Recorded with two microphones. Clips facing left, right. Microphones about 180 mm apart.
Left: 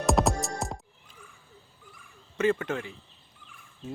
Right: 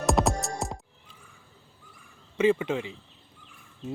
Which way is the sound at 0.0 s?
Centre (ahead or behind).